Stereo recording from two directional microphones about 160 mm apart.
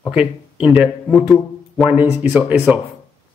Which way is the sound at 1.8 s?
10° right (ahead or behind).